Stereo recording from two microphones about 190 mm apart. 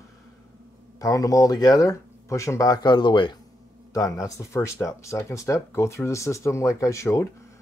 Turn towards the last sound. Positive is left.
turn(degrees=15)  # may be behind; listen again after turning